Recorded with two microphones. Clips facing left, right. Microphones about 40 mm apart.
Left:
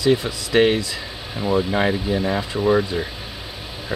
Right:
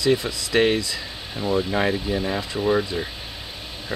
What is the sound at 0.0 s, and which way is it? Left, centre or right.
Speech, centre.